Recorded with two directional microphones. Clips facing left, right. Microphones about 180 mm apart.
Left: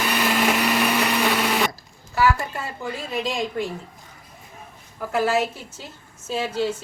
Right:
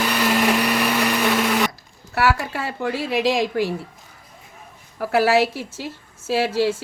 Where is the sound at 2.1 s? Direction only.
80° right.